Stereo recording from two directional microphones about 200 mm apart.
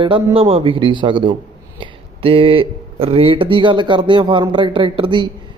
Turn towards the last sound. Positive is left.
turn(degrees=-25)  # may be behind; listen again after turning